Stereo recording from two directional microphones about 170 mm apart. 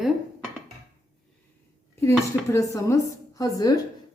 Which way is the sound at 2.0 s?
15° left (ahead or behind).